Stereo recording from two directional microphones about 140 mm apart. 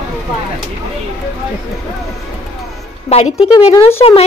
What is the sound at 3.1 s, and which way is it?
Speech, 45° left (ahead or behind).